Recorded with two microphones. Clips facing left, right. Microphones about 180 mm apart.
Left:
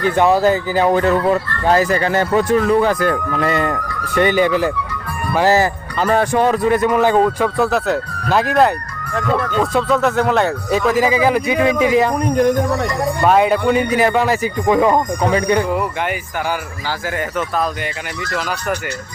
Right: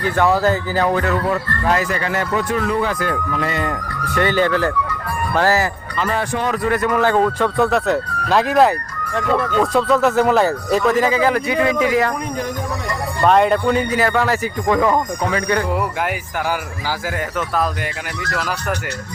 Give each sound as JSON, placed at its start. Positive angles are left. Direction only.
{"t": 0.2, "sound": "speech", "side_deg": 20}
{"t": 0.9, "sound": "speech", "side_deg": 30}
{"t": 4.2, "sound": "speech", "side_deg": 15}
{"t": 6.1, "sound": "speech", "side_deg": 45}
{"t": 6.5, "sound": "speech", "side_deg": 20}
{"t": 7.5, "sound": "speech", "side_deg": 0}
{"t": 12.4, "sound": "speech", "side_deg": 60}
{"t": 13.2, "sound": "speech", "side_deg": 5}